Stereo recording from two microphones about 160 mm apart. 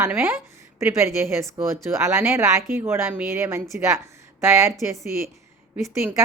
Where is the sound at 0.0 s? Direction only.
15° right (ahead or behind).